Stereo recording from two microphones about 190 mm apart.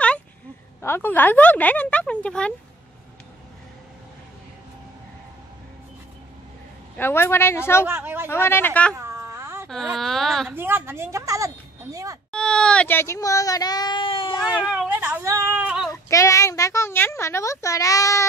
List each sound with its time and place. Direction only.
0.7 s a child's voice: 10° left (ahead or behind)
7.0 s a child's voice: 10° left (ahead or behind)
7.8 s a woman's voice: 10° right (ahead or behind)
8.3 s a child's voice: 10° left (ahead or behind)
8.9 s a sound: 15° right (ahead or behind)
9.9 s speech: centre (ahead or behind)
10.5 s a woman's voice: 10° right (ahead or behind)
12.3 s a child's voice: 5° left (ahead or behind); by 14.4 s 25° left (ahead or behind)
14.4 s speech: centre (ahead or behind)
15.9 s a child's voice: 15° left (ahead or behind)